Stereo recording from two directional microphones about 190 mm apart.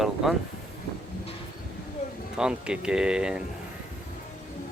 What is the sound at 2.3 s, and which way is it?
Speech, 5° right (ahead or behind).